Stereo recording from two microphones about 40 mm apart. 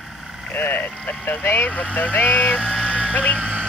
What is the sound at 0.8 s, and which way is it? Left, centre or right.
Speech, left.